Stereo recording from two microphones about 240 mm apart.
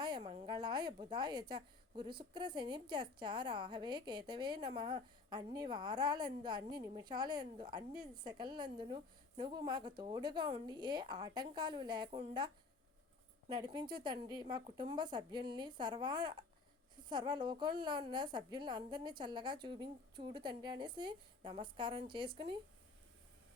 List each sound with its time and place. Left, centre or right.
0.3 s a woman's voice: centre
13.6 s a woman's voice: centre